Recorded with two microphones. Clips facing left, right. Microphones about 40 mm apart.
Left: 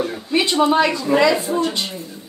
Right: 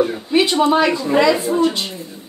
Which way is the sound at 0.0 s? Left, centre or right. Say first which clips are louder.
Right 4 dB; centre.